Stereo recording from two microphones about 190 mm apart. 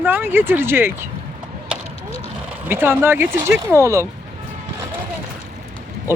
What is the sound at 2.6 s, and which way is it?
Speech, 10° right (ahead or behind).